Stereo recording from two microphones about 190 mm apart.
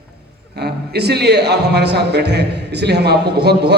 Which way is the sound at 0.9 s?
60° right (ahead or behind).